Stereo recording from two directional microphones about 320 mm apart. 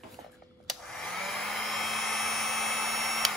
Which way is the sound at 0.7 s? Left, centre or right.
Centre.